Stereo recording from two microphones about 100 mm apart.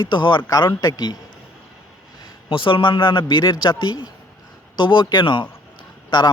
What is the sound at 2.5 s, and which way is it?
Speech, 55° left (ahead or behind).